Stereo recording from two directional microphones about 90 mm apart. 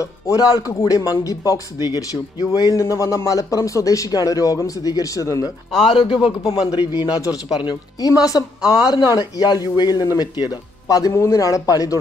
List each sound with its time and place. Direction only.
0.0 s speech: 40° left (ahead or behind)
5.9 s speech: 80° left
7.1 s speech: 45° left (ahead or behind)